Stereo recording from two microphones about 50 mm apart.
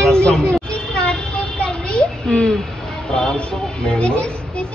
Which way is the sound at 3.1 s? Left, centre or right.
Centre.